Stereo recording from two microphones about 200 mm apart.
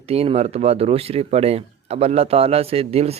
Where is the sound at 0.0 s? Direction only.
30° right (ahead or behind).